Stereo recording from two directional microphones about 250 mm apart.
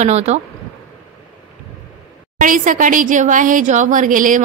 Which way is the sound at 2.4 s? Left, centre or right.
Right.